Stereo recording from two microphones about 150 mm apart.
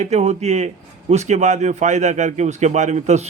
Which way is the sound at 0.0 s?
45° right (ahead or behind).